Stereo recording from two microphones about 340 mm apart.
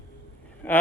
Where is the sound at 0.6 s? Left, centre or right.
Centre.